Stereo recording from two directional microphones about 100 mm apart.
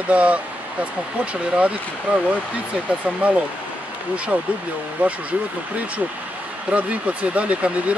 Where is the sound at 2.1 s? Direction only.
10° right (ahead or behind).